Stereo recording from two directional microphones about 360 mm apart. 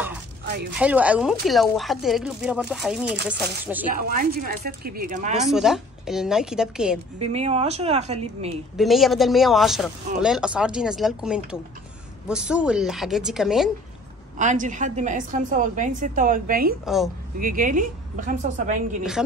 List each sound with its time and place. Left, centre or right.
0.7 s speech: centre
3.9 s a woman's voice: right
5.4 s speech: centre
7.2 s a woman's voice: centre
8.7 s speech: centre
14.4 s a woman's voice: right
16.8 s speech: centre
17.4 s a woman's voice: right
19.2 s speech: centre